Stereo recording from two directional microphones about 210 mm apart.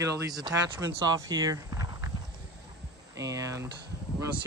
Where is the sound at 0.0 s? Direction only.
15° right (ahead or behind).